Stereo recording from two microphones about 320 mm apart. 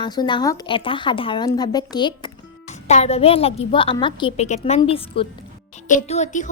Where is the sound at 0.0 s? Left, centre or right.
Centre.